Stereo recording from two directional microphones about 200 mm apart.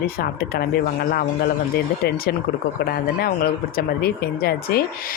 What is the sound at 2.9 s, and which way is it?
Speech, 50° left (ahead or behind).